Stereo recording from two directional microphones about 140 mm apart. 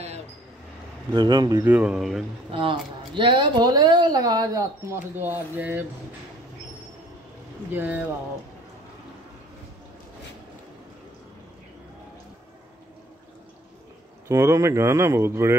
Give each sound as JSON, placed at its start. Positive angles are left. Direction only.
{"t": 1.1, "sound": "speech", "side_deg": -30}
{"t": 1.6, "sound": "speech", "side_deg": -10}
{"t": 2.5, "sound": "a woman's voice", "side_deg": -40}
{"t": 7.7, "sound": "speech", "side_deg": -10}
{"t": 14.2, "sound": "a woman's voice", "side_deg": -20}